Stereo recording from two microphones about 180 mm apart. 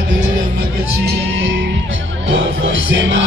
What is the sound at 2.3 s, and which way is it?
Music, 90° right.